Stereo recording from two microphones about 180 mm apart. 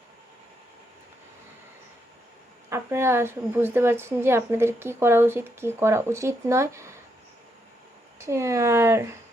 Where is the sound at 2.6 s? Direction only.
15° right (ahead or behind).